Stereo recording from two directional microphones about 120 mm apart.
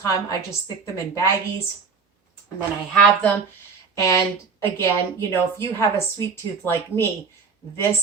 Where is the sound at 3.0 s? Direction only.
10° left (ahead or behind).